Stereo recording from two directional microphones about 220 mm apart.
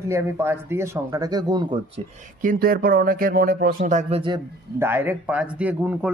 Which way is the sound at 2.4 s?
40° right (ahead or behind).